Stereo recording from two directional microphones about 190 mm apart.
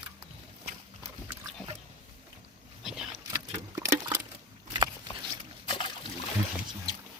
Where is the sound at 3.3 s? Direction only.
15° right (ahead or behind).